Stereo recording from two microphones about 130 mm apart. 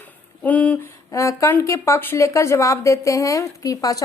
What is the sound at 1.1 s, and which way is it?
A woman's voice, 25° left (ahead or behind).